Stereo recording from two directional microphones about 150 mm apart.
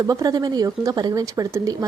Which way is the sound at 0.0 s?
25° right (ahead or behind).